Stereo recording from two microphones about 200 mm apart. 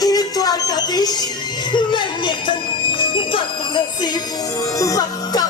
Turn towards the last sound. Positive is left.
turn(degrees=20)  # may be behind; listen again after turning